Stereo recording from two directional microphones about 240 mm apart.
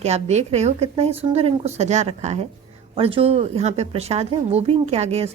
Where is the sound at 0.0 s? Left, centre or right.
Right.